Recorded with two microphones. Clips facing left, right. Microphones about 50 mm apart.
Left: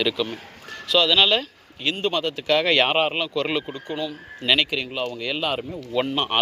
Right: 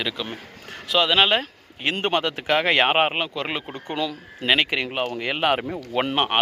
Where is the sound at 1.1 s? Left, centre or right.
Right.